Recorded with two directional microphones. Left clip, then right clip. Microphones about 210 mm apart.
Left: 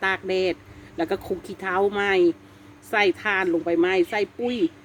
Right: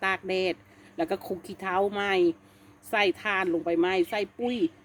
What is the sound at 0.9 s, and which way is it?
Speech, 30° right (ahead or behind).